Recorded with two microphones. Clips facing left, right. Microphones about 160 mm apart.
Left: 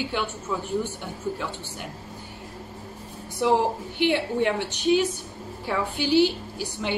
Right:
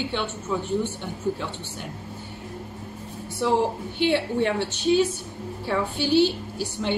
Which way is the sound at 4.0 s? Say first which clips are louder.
Right 1 dB; 15° left (ahead or behind).